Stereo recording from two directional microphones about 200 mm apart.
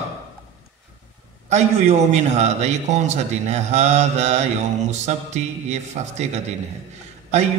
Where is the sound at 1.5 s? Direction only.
35° right (ahead or behind).